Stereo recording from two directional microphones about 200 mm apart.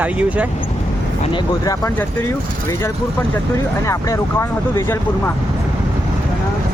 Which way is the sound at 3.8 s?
15° left (ahead or behind).